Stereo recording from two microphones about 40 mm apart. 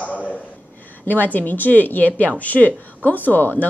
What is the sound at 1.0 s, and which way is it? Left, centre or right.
A woman's voice, left.